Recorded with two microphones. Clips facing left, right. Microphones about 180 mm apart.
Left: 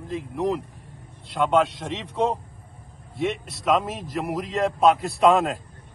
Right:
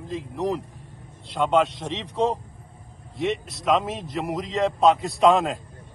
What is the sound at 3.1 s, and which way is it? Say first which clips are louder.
A man's voice: right 1 dB; centre (ahead or behind).